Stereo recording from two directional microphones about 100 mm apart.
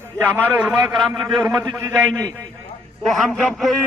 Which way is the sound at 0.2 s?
20° right (ahead or behind).